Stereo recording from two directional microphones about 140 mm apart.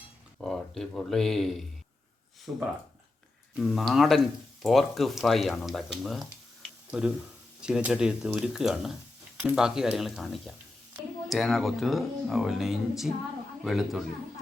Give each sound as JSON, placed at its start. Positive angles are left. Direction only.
{"t": 0.3, "sound": "speech", "side_deg": 0}
{"t": 2.5, "sound": "speech", "side_deg": -20}
{"t": 3.5, "sound": "speech", "side_deg": 0}